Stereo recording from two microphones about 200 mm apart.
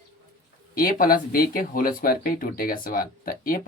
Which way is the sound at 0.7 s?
45° left (ahead or behind).